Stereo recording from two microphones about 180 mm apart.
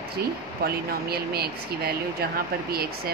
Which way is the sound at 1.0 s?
60° right (ahead or behind).